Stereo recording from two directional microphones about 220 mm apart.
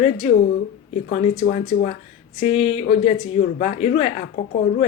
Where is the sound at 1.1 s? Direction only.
35° left (ahead or behind).